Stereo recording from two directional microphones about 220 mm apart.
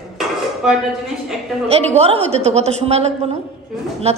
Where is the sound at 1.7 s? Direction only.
30° right (ahead or behind).